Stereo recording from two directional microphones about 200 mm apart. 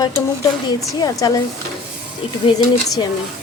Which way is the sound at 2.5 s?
20° left (ahead or behind).